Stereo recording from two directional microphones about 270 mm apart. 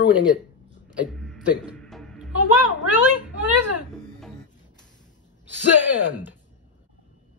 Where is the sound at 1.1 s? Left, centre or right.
Centre.